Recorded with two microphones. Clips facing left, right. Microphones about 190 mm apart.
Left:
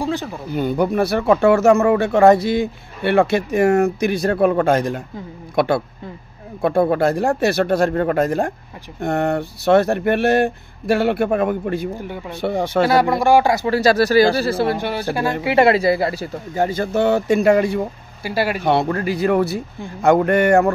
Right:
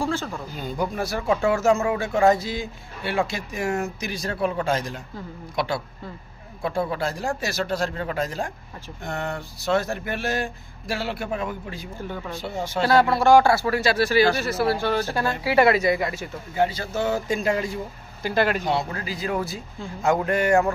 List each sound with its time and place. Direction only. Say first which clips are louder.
0.0 s speech: left 3 dB; 15° left (ahead or behind)
0.5 s speech: left 11 dB; 65° left (ahead or behind)
12.8 s speech: left 1 dB; 15° left (ahead or behind)
13.7 s speech: left 6 dB; 40° left (ahead or behind); by 15.3 s 15° left (ahead or behind)
15.4 s speech: left 4 dB; 25° left (ahead or behind); by 17.8 s 70° left (ahead or behind)
18.2 s speech: left 1 dB; 10° left (ahead or behind)
18.6 s speech: left 8 dB; 60° left (ahead or behind)